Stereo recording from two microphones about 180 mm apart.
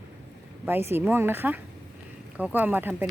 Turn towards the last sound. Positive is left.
turn(degrees=-10)  # may be behind; listen again after turning